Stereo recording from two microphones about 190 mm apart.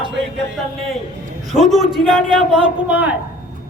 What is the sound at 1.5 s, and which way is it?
A man's voice, centre (ahead or behind).